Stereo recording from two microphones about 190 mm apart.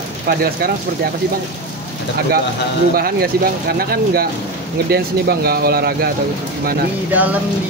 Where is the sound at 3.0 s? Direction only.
55° right (ahead or behind).